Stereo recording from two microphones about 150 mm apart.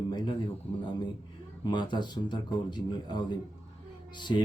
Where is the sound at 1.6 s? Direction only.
30° left (ahead or behind).